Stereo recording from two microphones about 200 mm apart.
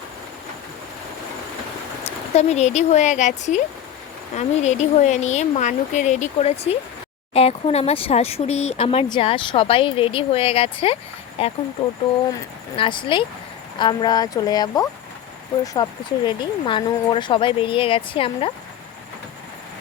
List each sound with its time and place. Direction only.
2.0 s speech: 35° left (ahead or behind)
12.7 s speech: 25° left (ahead or behind)